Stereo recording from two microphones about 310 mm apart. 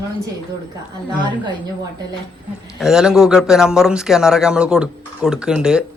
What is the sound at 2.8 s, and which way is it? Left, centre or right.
Speech, centre.